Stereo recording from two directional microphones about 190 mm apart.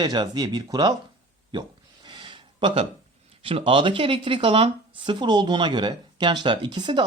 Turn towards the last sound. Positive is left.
turn(degrees=-25)  # may be behind; listen again after turning